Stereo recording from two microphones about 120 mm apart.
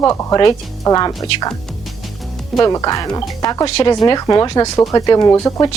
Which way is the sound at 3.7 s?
50° left (ahead or behind).